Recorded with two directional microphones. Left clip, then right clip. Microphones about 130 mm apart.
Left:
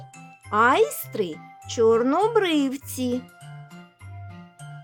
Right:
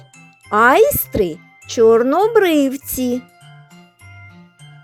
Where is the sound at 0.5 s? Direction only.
45° right (ahead or behind).